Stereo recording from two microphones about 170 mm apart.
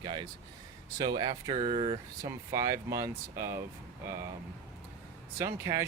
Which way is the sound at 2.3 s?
15° right (ahead or behind).